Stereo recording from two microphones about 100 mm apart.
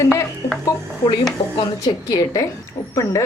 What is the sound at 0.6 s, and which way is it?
Speech, 45° left (ahead or behind).